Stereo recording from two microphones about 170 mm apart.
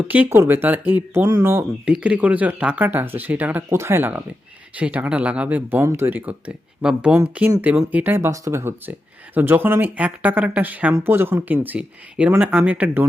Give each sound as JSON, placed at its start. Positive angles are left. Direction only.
{"t": 0.1, "sound": "speech", "side_deg": -10}